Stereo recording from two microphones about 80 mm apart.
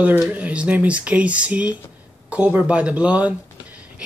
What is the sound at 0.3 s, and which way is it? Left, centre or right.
Speech, centre.